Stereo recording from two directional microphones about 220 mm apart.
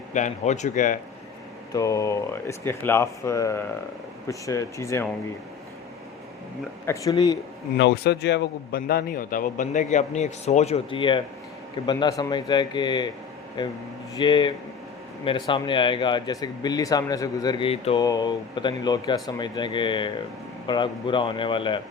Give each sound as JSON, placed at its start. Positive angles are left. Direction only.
{"t": 0.1, "sound": "a man's voice", "side_deg": 35}
{"t": 1.7, "sound": "speech", "side_deg": 15}
{"t": 6.8, "sound": "speech", "side_deg": 15}
{"t": 7.8, "sound": "a man's voice", "side_deg": 50}